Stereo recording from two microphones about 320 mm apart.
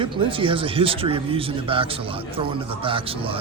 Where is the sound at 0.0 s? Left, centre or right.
Centre.